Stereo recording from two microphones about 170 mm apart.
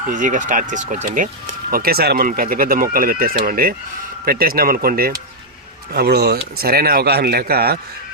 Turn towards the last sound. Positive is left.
turn(degrees=-65)  # may be behind; listen again after turning